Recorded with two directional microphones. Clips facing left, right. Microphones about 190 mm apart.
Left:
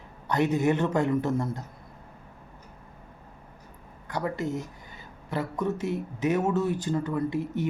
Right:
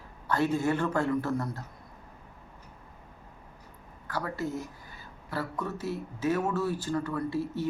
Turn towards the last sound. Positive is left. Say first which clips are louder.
# left 3 dB
turn(degrees=20)  # may be behind; listen again after turning